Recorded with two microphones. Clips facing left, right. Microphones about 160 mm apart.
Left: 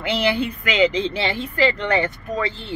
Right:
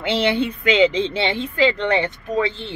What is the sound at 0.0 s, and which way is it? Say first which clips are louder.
A woman's voice: right 2 dB; 25° right (ahead or behind).